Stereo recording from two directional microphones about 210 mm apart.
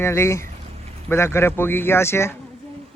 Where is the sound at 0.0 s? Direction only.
15° left (ahead or behind).